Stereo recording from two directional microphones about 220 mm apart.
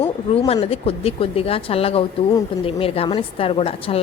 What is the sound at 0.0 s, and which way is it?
A woman's voice, 25° left (ahead or behind).